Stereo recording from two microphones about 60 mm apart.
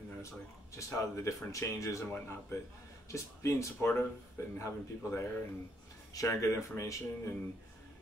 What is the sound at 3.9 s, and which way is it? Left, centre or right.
Speech, left.